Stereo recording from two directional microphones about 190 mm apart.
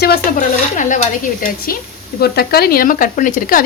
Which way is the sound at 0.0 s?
50° left (ahead or behind).